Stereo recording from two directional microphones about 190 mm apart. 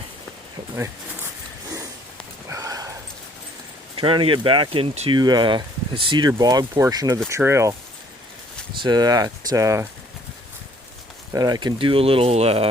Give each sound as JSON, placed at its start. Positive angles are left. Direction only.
{"t": 2.5, "sound": "a sound", "side_deg": -20}
{"t": 3.9, "sound": "speech", "side_deg": -25}
{"t": 8.8, "sound": "speech", "side_deg": -20}
{"t": 11.3, "sound": "speech", "side_deg": -20}